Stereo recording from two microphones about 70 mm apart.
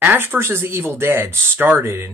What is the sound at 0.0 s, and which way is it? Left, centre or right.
A man's voice, right.